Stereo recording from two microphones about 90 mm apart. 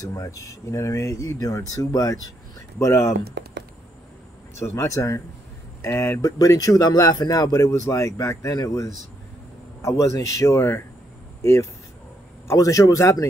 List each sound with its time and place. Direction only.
0.0 s speech: 35° left (ahead or behind)
4.6 s speech: 35° left (ahead or behind)